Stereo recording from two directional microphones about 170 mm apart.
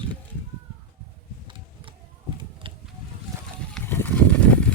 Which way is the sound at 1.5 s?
30° right (ahead or behind).